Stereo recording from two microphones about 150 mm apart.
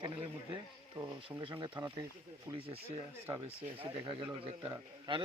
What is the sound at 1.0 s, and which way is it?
Speech, 30° right (ahead or behind).